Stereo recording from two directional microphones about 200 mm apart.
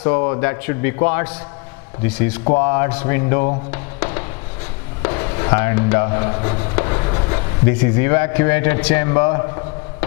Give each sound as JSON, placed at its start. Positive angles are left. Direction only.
{"t": 0.1, "sound": "a man's voice", "side_deg": 15}
{"t": 3.7, "sound": "a sound", "side_deg": 15}
{"t": 7.7, "sound": "a man's voice", "side_deg": 10}